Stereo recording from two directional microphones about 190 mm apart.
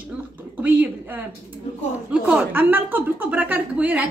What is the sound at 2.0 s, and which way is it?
A woman's voice, 5° right (ahead or behind).